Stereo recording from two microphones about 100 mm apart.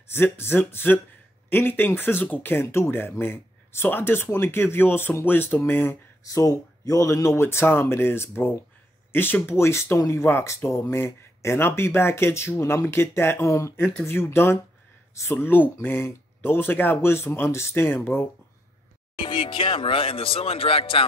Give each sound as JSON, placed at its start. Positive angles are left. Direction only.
{"t": 0.1, "sound": "speech", "side_deg": 25}
{"t": 6.2, "sound": "speech", "side_deg": 35}
{"t": 19.1, "sound": "speech", "side_deg": 55}